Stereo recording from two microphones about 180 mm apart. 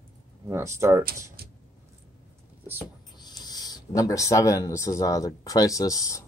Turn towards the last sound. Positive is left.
turn(degrees=20)  # may be behind; listen again after turning